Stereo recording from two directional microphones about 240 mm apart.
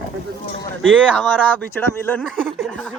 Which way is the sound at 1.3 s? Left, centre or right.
Centre.